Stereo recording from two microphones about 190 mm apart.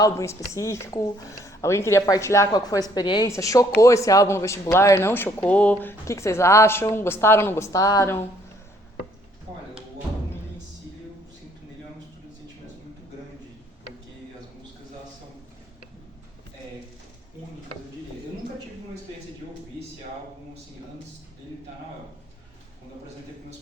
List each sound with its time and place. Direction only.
0.0 s speech: 15° left (ahead or behind)
9.5 s speech: 20° right (ahead or behind)